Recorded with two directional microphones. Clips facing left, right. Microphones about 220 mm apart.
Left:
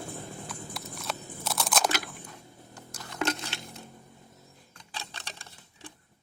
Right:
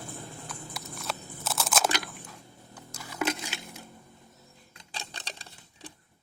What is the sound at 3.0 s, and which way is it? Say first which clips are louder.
Coin: even; 10° right (ahead or behind).